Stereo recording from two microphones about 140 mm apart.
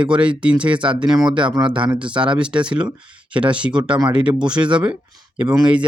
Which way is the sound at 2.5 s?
5° right (ahead or behind).